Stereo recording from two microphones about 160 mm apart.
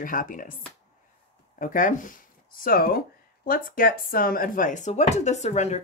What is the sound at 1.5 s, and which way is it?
Speech, 55° left (ahead or behind).